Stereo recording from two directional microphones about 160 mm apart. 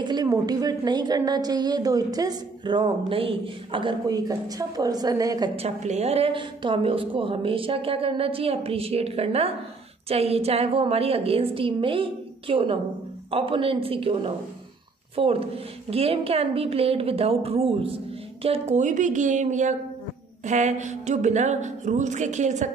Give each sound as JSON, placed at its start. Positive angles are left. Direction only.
{"t": 0.0, "sound": "a woman's voice", "side_deg": -25}
{"t": 5.6, "sound": "a woman's voice", "side_deg": -45}